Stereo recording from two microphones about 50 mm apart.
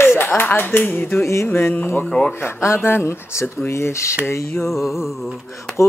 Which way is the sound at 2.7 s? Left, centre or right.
Left.